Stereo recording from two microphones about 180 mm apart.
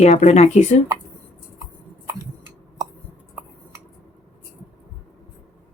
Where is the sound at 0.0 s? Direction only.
35° left (ahead or behind).